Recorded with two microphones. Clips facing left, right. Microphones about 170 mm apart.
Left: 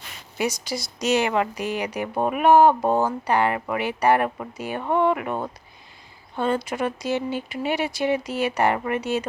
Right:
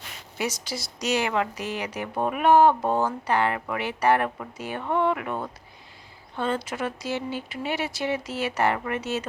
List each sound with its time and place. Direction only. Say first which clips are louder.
0.3 s a woman's voice: left 4 dB; 15° left (ahead or behind)
6.3 s a woman's voice: left 4 dB; 15° left (ahead or behind)